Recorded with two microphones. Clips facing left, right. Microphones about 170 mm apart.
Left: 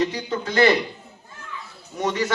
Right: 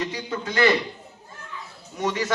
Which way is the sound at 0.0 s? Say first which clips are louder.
Left 5 dB; 30° left (ahead or behind).